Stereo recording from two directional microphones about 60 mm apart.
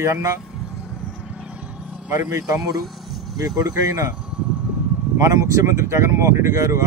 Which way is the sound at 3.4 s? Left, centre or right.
Right.